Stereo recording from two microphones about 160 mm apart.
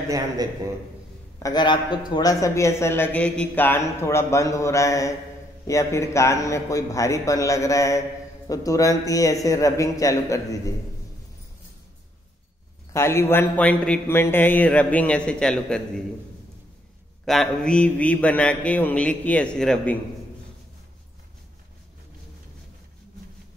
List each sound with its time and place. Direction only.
1.4 s a man's voice: 25° left (ahead or behind)
12.9 s a man's voice: 15° left (ahead or behind)
17.2 s a man's voice: centre (ahead or behind)